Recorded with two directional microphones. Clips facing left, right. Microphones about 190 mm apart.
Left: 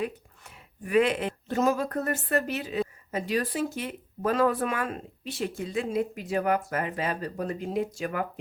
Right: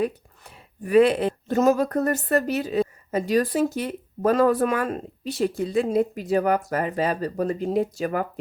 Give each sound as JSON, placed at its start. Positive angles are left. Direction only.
{"t": 0.0, "sound": "speech", "side_deg": -35}